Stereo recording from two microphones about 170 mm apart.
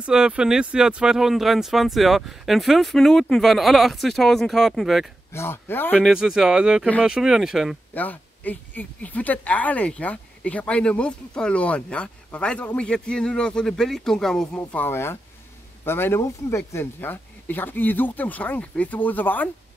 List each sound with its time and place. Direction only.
0.0 s speech: 5° right (ahead or behind)
5.3 s speech: 15° left (ahead or behind)
6.0 s speech: centre (ahead or behind)
7.9 s speech: 10° left (ahead or behind)